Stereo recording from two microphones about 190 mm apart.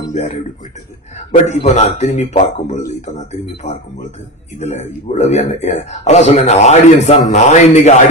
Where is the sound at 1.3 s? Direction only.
35° left (ahead or behind).